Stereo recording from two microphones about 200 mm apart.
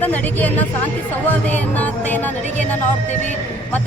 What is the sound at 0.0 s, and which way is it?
Music, 10° left (ahead or behind).